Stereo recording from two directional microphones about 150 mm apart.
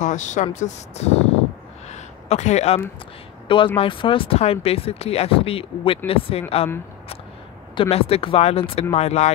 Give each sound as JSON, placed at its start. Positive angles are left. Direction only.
{"t": 0.0, "sound": "speech", "side_deg": 55}
{"t": 1.9, "sound": "a sound", "side_deg": 50}
{"t": 3.4, "sound": "speech", "side_deg": 35}
{"t": 7.7, "sound": "speech", "side_deg": 40}